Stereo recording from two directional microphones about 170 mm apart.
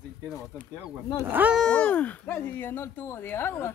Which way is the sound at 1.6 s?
5° left (ahead or behind).